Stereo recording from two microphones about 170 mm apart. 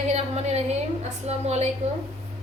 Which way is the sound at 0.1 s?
40° right (ahead or behind).